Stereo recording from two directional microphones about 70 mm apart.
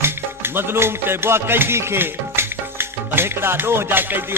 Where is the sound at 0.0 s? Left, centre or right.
Right.